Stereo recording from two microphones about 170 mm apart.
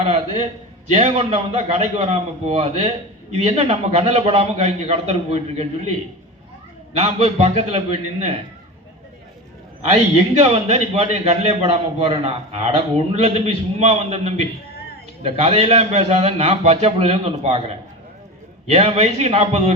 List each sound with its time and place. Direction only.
0.9 s a man's voice: 35° right (ahead or behind)
7.0 s a man's voice: 40° right (ahead or behind)
10.4 s a man's voice: 35° right (ahead or behind)
14.7 s a sound: 65° left (ahead or behind)
15.2 s a man's voice: 35° right (ahead or behind)